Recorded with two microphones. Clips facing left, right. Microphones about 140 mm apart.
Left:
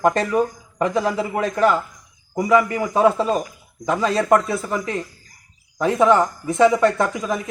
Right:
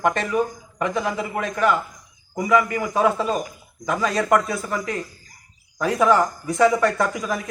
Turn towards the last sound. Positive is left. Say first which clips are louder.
# left 2 dB
turn(degrees=25)  # may be behind; listen again after turning